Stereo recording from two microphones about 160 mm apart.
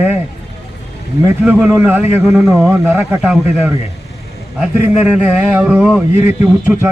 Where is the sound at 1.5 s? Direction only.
5° right (ahead or behind).